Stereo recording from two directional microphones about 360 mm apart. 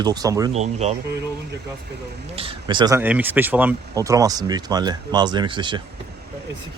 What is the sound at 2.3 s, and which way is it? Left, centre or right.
Speech, centre.